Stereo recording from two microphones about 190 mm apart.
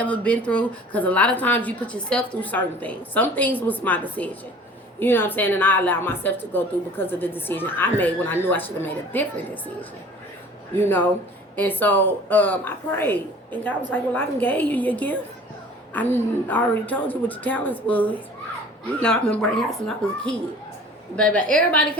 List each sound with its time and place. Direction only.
0.0 s a woman's voice: 5° left (ahead or behind)
10.8 s a woman's voice: 10° left (ahead or behind)
21.3 s a woman's voice: 45° right (ahead or behind)